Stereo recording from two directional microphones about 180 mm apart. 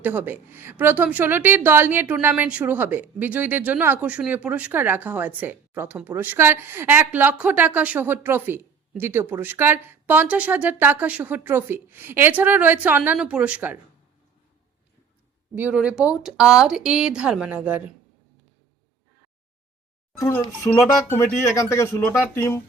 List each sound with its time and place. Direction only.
0.0 s a woman's voice: 10° right (ahead or behind)
15.5 s speech: 10° right (ahead or behind)
20.1 s speech: 15° left (ahead or behind)